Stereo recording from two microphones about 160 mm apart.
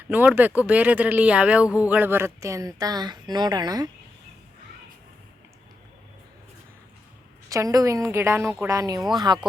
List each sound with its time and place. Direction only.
0.1 s speech: 10° right (ahead or behind)
7.5 s speech: 20° right (ahead or behind)